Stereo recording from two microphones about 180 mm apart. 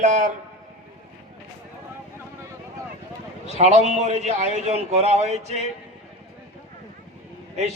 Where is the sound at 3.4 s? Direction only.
40° right (ahead or behind).